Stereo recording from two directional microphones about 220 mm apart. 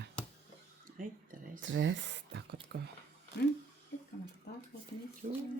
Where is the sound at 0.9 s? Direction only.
40° right (ahead or behind).